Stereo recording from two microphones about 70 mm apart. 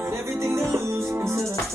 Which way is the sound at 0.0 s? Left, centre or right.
Right.